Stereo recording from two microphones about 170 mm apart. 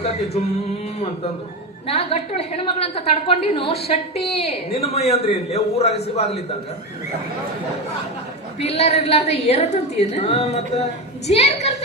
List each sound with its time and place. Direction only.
1.9 s a woman's voice: 35° left (ahead or behind)
8.5 s a woman's voice: 40° left (ahead or behind)